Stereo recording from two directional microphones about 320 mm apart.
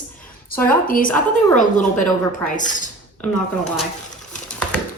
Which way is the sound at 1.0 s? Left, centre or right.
Centre.